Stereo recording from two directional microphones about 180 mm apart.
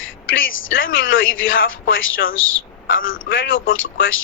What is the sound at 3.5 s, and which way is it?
Speech, 90° left.